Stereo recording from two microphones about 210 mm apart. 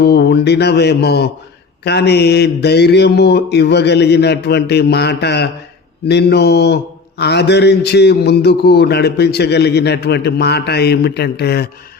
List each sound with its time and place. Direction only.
0.0 s a man's voice: 50° left (ahead or behind)